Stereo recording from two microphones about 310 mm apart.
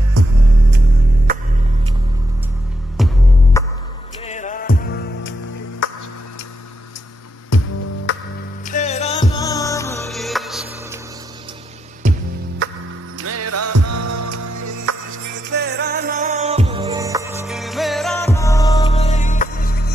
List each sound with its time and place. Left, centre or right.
0.7 s music: right
3.0 s music: centre
3.6 s music: centre
4.3 s music: left
8.1 s music: left
8.6 s music: left; by 11.0 s centre
12.0 s music: right
13.2 s music: right
15.3 s music: right; by 19.9 s left